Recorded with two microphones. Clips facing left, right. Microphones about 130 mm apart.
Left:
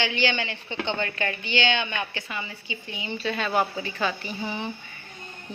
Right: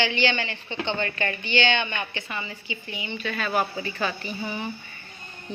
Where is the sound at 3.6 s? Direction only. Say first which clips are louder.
Right 1 dB; 20° left (ahead or behind).